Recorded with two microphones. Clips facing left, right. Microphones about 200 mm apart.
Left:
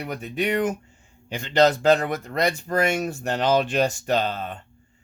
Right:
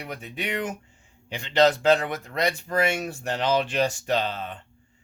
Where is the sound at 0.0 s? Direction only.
45° left (ahead or behind).